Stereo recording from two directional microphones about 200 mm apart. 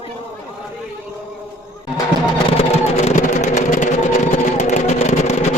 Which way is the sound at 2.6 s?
30° left (ahead or behind).